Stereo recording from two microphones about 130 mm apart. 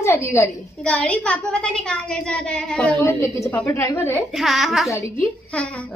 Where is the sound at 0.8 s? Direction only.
10° left (ahead or behind).